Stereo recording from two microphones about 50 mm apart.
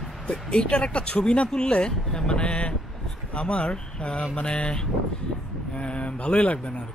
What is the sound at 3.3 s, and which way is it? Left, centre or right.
Speech, left.